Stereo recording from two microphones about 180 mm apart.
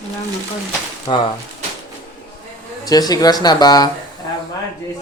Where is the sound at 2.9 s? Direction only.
20° left (ahead or behind).